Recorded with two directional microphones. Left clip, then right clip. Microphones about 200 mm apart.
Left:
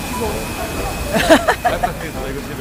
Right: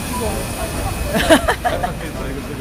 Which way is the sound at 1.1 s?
5° left (ahead or behind).